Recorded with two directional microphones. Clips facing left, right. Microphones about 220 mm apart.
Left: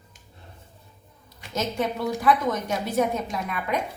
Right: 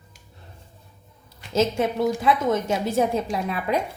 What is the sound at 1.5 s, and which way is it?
A woman's voice, 25° right (ahead or behind).